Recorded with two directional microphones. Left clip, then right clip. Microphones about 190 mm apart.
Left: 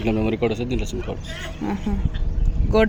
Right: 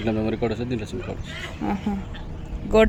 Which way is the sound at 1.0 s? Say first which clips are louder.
Left 2 dB; 65° left (ahead or behind).